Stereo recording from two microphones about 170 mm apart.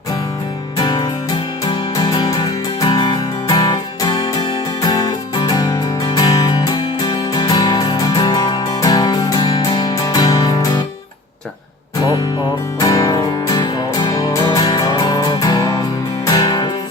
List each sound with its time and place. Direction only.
0.8 s music: 25° left (ahead or behind)
12.8 s music: 20° left (ahead or behind)